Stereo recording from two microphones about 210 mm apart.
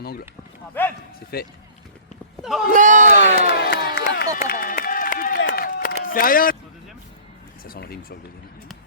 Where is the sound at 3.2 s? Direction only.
50° left (ahead or behind).